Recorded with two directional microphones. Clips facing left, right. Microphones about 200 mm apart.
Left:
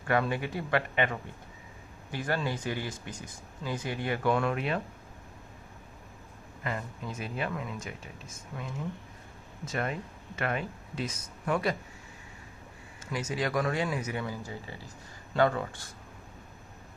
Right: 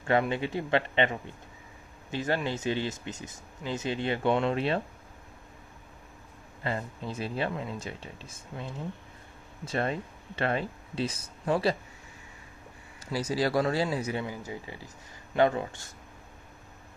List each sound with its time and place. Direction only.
0.0 s speech: 25° right (ahead or behind)
6.6 s speech: 30° right (ahead or behind)
13.0 s speech: 35° right (ahead or behind)
14.3 s speech: 15° right (ahead or behind)